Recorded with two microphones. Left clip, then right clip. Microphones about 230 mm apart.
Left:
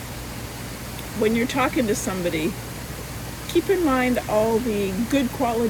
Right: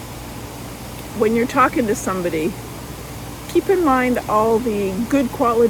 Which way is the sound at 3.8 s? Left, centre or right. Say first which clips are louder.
Right 4 dB; right.